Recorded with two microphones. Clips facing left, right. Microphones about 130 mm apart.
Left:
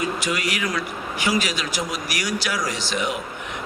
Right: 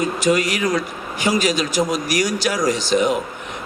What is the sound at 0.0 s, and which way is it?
A man's voice, 40° right (ahead or behind).